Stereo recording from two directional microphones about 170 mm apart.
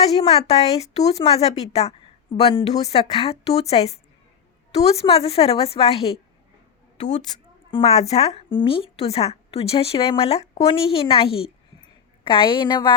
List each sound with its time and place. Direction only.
0.0 s a woman's voice: 35° left (ahead or behind)